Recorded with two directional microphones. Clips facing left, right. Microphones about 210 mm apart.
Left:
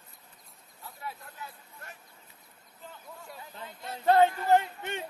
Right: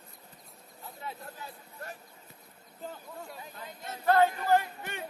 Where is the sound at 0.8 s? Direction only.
20° right (ahead or behind).